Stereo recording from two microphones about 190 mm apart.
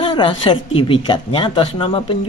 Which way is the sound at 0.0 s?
25° left (ahead or behind).